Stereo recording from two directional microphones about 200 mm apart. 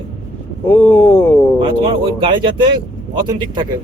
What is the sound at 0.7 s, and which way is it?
Speech, 10° left (ahead or behind).